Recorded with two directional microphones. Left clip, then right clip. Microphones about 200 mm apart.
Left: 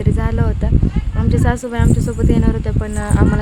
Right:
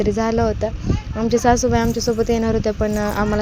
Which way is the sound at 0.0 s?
15° right (ahead or behind).